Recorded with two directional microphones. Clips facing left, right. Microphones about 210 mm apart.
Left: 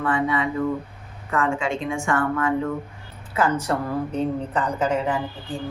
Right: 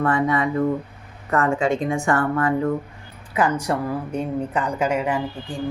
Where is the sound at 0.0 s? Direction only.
40° right (ahead or behind).